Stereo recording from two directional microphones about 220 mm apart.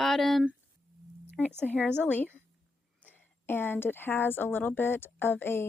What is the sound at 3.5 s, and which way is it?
Speech, 10° left (ahead or behind).